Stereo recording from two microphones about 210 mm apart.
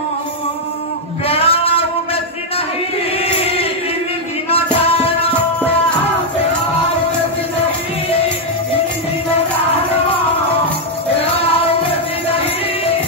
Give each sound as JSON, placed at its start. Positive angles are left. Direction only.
{"t": 1.2, "sound": "a sound", "side_deg": 25}
{"t": 3.2, "sound": "chant", "side_deg": 30}
{"t": 4.8, "sound": "music", "side_deg": 25}